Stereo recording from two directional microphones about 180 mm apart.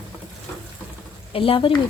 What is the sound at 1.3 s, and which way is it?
Speech, 30° left (ahead or behind).